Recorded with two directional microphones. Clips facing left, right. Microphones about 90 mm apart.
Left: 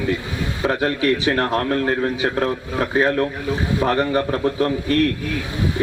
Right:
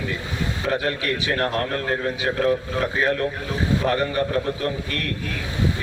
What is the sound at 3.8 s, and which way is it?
A man's voice, 35° left (ahead or behind).